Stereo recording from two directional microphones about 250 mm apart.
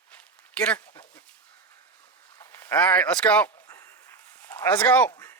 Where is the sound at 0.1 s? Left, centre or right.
Centre.